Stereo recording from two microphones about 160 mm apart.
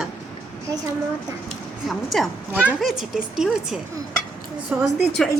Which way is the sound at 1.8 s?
Centre (ahead or behind).